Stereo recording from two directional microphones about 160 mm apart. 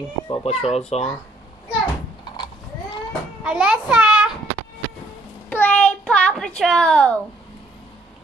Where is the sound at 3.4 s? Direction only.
5° right (ahead or behind).